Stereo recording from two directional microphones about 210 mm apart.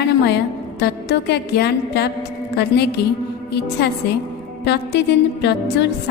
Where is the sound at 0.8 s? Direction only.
55° left (ahead or behind).